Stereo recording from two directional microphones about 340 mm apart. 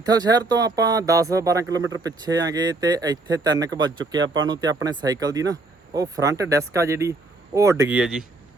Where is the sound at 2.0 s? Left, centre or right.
Centre.